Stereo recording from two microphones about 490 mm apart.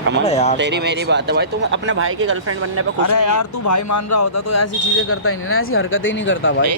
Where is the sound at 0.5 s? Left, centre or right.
Right.